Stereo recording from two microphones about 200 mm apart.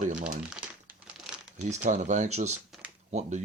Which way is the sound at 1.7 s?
35° right (ahead or behind).